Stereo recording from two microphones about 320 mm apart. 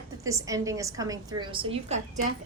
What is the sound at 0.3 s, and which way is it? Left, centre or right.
A woman's voice, centre.